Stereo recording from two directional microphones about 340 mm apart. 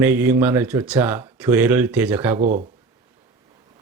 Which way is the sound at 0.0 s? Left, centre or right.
Centre.